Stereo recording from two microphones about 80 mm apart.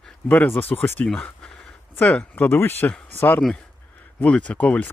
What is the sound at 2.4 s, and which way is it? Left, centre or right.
Speech, left.